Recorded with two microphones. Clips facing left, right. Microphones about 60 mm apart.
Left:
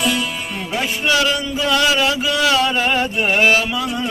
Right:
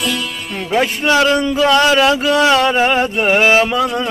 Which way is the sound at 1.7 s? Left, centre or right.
Right.